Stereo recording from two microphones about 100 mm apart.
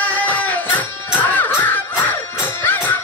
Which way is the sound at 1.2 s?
15° left (ahead or behind).